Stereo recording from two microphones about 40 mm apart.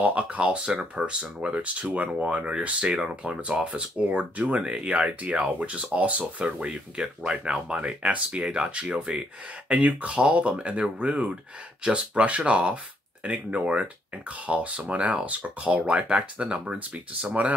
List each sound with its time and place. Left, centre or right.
0.0 s speech: right
4.2 s speech: right
4.6 s speech: right
6.4 s speech: right
9.7 s speech: right